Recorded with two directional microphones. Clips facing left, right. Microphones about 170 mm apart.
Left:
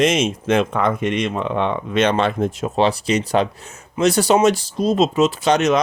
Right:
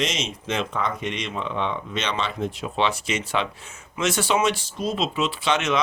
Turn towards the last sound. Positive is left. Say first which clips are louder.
# left 7 dB
turn(degrees=40)  # may be behind; listen again after turning